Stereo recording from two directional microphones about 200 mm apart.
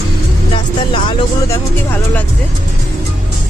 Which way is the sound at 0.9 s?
25° left (ahead or behind).